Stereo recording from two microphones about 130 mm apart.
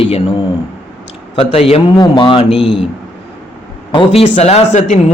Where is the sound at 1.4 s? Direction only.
50° left (ahead or behind).